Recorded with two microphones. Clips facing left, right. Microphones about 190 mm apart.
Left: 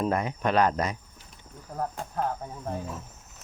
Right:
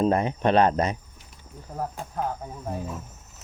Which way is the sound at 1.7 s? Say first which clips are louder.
Even; 5° right (ahead or behind).